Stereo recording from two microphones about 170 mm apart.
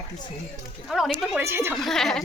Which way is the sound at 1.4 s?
15° right (ahead or behind).